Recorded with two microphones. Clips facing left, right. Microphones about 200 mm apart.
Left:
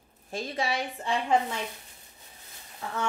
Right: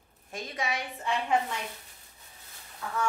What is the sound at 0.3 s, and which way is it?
Speech, 30° left (ahead or behind).